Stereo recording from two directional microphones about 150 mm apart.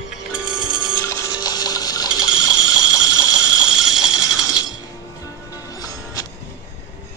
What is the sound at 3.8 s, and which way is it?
Ratchet, 5° right (ahead or behind).